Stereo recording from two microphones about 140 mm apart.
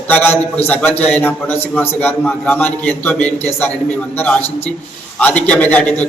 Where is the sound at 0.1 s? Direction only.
15° left (ahead or behind).